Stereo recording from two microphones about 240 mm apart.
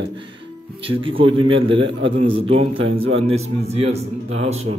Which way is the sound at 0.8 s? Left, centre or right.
Right.